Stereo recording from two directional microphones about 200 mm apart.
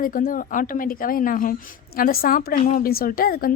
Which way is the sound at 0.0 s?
45° left (ahead or behind).